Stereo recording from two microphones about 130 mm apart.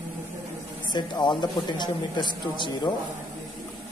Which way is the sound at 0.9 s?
35° left (ahead or behind).